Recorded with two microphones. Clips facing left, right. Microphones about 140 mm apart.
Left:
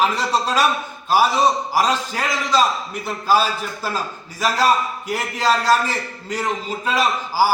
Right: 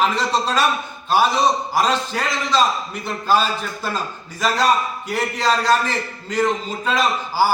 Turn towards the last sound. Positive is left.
turn(degrees=10)  # may be behind; listen again after turning